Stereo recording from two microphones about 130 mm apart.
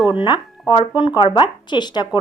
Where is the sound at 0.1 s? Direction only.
35° left (ahead or behind).